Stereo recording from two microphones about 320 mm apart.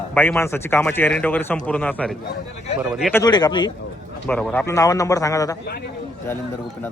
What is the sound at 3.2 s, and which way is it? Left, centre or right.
A man's voice, centre.